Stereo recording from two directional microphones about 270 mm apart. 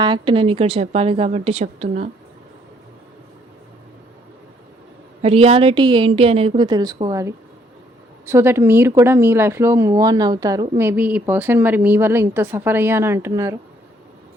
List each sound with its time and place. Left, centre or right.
0.0 s a woman's voice: centre
5.2 s a woman's voice: right